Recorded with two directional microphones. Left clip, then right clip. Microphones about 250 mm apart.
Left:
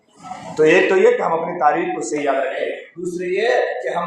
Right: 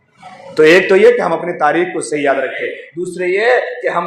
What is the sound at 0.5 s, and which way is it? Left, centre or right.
Speech, right.